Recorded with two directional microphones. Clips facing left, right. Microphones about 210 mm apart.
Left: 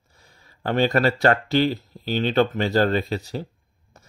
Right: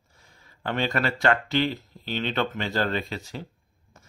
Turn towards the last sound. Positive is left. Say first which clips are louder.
# left 6 dB
turn(degrees=35)  # may be behind; listen again after turning